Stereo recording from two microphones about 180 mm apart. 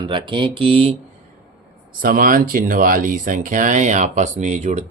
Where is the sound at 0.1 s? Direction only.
25° right (ahead or behind).